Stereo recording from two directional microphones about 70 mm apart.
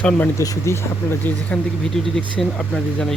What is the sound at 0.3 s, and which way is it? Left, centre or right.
Speech, left.